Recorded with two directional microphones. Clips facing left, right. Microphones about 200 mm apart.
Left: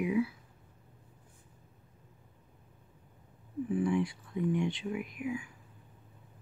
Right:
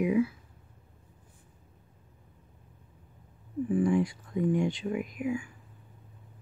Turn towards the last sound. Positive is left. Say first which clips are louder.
# right 5 dB
turn(degrees=-45)  # may be behind; listen again after turning